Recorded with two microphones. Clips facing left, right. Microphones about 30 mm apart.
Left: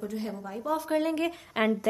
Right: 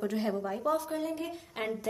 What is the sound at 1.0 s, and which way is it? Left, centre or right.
Speech, left.